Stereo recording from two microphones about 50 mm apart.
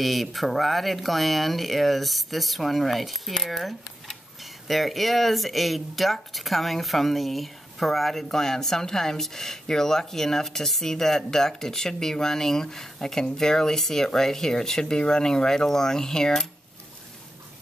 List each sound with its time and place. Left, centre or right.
0.0 s speech: centre